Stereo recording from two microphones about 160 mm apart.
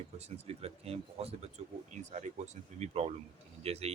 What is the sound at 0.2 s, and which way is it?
A man's voice, 40° right (ahead or behind).